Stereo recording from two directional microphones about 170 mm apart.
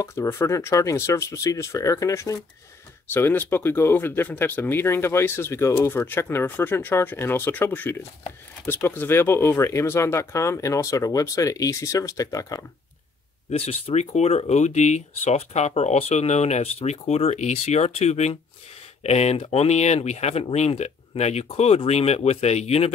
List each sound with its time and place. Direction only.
0.0 s speech: 15° left (ahead or behind)
13.5 s speech: 35° left (ahead or behind)